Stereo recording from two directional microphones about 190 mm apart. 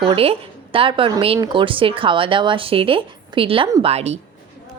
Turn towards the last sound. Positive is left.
turn(degrees=-35)  # may be behind; listen again after turning